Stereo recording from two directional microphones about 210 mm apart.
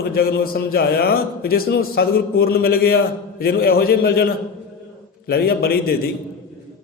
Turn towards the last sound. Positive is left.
turn(degrees=45)  # may be behind; listen again after turning